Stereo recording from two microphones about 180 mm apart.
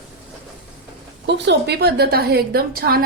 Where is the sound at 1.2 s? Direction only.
75° right (ahead or behind); by 3.0 s 55° right (ahead or behind).